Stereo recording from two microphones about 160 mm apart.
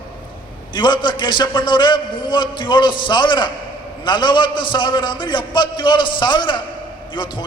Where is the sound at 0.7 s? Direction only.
30° left (ahead or behind).